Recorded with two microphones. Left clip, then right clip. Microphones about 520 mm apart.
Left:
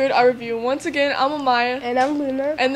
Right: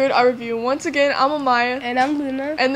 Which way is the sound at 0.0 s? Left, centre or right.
Right.